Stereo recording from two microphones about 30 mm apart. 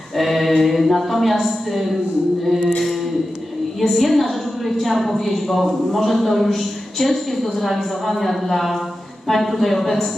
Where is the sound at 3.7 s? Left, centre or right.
Centre.